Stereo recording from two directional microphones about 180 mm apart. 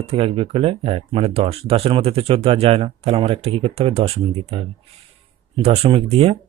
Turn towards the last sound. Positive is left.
turn(degrees=-35)  # may be behind; listen again after turning